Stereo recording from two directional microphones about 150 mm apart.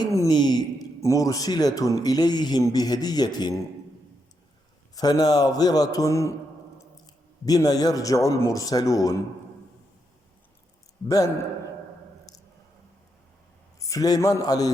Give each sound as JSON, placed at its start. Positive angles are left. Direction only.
{"t": 0.0, "sound": "speech", "side_deg": 25}
{"t": 4.9, "sound": "speech", "side_deg": 25}
{"t": 7.4, "sound": "speech", "side_deg": 25}
{"t": 12.3, "sound": "squish", "side_deg": 25}
{"t": 13.9, "sound": "speech", "side_deg": 25}